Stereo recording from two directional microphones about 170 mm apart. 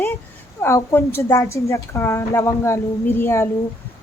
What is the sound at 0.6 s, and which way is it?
A woman's voice, 15° left (ahead or behind).